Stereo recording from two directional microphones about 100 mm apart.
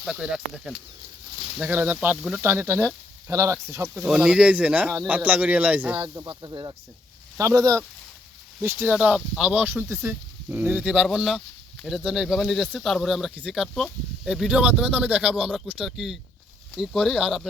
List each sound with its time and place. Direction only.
0.0 s speech: 5° right (ahead or behind)
1.7 s speech: 20° right (ahead or behind)
4.0 s speech: 10° right (ahead or behind)
6.2 s speech: 50° right (ahead or behind)
7.3 s speech: 30° right (ahead or behind)
8.6 s speech: 20° right (ahead or behind)
11.0 s speech: centre (ahead or behind)